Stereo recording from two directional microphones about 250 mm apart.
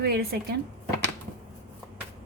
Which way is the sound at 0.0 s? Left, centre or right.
Right.